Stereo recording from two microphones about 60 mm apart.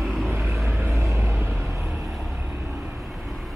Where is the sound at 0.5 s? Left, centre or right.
Right.